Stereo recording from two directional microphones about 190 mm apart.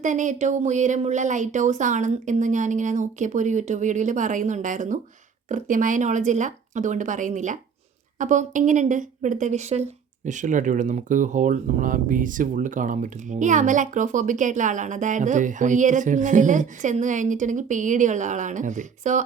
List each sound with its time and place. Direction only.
0.0 s speech: 40° right (ahead or behind)